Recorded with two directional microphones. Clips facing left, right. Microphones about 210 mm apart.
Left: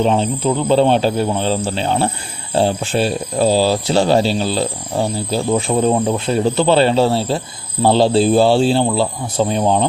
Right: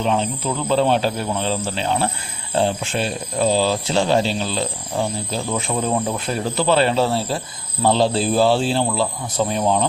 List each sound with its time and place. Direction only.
0.0 s speech: 35° left (ahead or behind)